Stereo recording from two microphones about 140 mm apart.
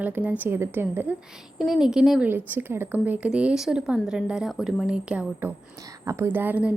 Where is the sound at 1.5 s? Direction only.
5° right (ahead or behind).